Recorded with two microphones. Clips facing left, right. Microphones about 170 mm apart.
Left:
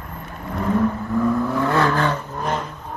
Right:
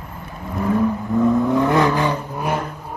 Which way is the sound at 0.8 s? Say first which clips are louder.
Right 2 dB; 20° right (ahead or behind).